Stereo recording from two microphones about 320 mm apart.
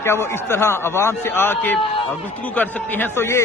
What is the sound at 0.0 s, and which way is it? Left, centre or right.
A man's voice, centre.